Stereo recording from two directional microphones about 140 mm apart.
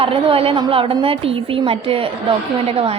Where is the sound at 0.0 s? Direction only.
40° right (ahead or behind).